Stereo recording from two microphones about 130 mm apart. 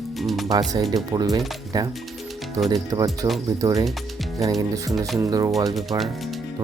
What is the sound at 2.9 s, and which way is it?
Speech, 25° right (ahead or behind).